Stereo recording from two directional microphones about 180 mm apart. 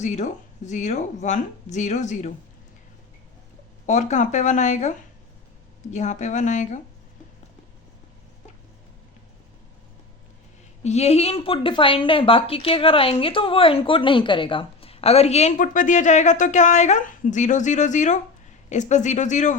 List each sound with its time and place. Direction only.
0.0 s speech: 40° left (ahead or behind)
3.8 s speech: 40° left (ahead or behind)
10.8 s speech: 35° left (ahead or behind)